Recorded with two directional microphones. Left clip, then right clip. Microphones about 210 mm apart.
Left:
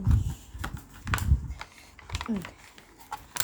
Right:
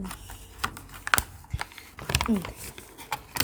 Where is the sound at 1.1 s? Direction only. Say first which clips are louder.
Right 7 dB; 45° right (ahead or behind).